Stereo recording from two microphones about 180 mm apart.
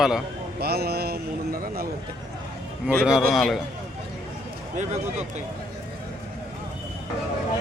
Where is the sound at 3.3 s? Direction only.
Centre (ahead or behind).